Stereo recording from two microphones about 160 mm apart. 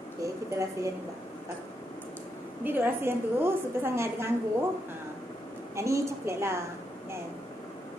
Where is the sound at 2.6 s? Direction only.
15° right (ahead or behind).